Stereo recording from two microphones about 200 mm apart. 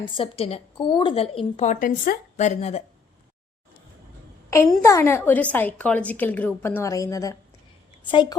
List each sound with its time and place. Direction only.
0.0 s a woman's voice: 30° left (ahead or behind)
4.8 s a woman's voice: 15° left (ahead or behind)